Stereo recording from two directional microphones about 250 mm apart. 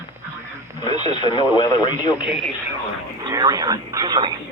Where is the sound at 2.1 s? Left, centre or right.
Centre.